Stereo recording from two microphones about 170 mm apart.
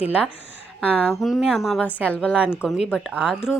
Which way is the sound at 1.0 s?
Centre (ahead or behind).